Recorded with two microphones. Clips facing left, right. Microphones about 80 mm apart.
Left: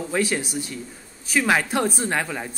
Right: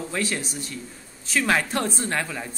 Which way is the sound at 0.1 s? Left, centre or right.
Centre.